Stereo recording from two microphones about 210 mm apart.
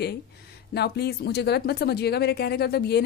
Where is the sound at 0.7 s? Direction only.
50° left (ahead or behind).